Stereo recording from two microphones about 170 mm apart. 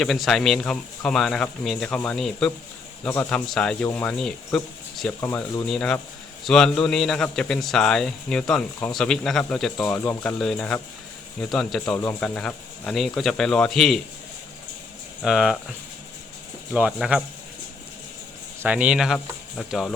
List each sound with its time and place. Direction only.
0.0 s a man's voice: centre (ahead or behind)
5.2 s speech: 15° left (ahead or behind)
5.6 s a man's voice: 5° left (ahead or behind)
15.2 s a man's voice: centre (ahead or behind)
16.7 s a man's voice: 5° right (ahead or behind)
18.6 s a man's voice: 10° right (ahead or behind)